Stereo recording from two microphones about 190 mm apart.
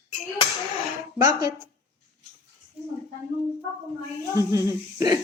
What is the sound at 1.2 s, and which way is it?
Speech, 20° right (ahead or behind).